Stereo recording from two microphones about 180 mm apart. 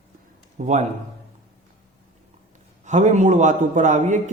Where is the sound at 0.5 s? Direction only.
40° right (ahead or behind).